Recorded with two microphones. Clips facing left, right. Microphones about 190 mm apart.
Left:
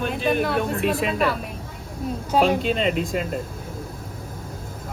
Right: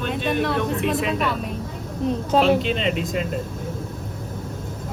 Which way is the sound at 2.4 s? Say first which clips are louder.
Right 1 dB; 45° left (ahead or behind).